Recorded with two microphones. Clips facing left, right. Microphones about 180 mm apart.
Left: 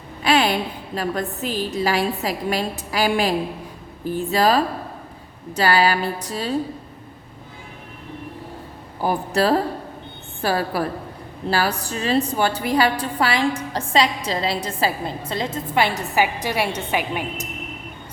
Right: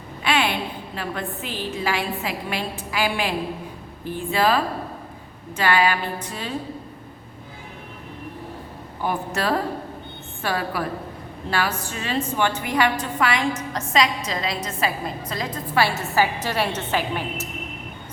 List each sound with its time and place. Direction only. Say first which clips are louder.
0.2 s a sound: left 4 dB; 35° left (ahead or behind)
0.9 s a woman's voice: left 6 dB; 40° left (ahead or behind)
9.0 s a woman's voice: left 5 dB; 35° left (ahead or behind); by 17.4 s 15° left (ahead or behind)